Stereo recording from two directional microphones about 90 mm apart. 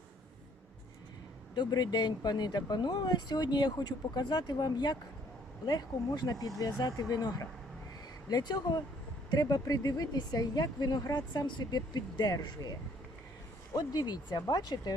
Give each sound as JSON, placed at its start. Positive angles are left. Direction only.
{"t": 1.5, "sound": "speech", "side_deg": 50}
{"t": 13.7, "sound": "speech", "side_deg": 50}